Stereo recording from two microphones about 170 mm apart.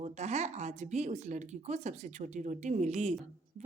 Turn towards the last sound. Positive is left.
turn(degrees=-40)  # may be behind; listen again after turning